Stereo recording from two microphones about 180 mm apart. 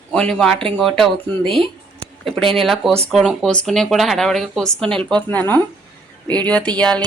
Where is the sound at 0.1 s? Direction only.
5° left (ahead or behind).